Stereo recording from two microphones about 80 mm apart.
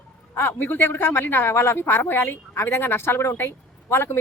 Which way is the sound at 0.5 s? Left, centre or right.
Left.